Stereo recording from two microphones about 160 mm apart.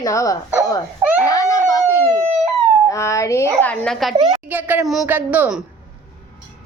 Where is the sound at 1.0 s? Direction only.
10° right (ahead or behind).